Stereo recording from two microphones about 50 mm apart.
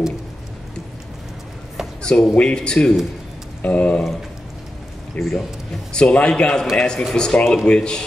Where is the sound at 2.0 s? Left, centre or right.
Centre.